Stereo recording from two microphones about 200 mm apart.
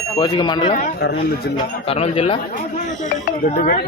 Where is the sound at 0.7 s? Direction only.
40° left (ahead or behind).